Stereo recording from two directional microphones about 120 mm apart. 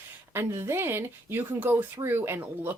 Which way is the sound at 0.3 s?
20° right (ahead or behind).